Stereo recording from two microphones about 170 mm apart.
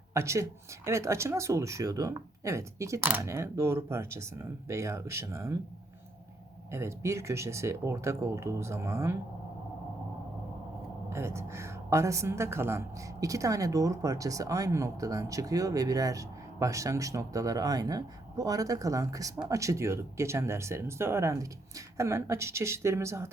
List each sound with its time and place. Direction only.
0.1 s speech: 15° right (ahead or behind)
6.7 s speech: 15° right (ahead or behind)
11.1 s a woman's voice: 15° right (ahead or behind)